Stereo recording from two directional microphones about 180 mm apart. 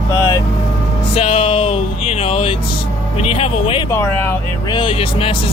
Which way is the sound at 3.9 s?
15° left (ahead or behind).